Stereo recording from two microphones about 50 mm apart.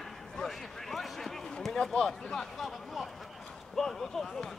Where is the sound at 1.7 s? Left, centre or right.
Centre.